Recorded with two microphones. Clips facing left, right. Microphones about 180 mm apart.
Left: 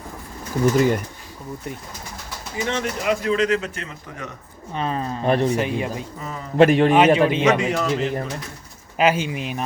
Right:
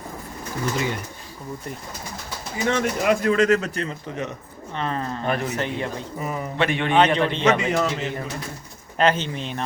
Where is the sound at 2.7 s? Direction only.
50° right (ahead or behind); by 4.0 s 35° right (ahead or behind).